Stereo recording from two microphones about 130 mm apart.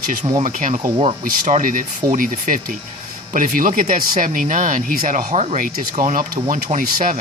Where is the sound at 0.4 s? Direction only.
85° right.